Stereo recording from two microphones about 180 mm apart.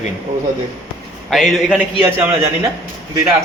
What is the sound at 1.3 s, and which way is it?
Speech, centre (ahead or behind).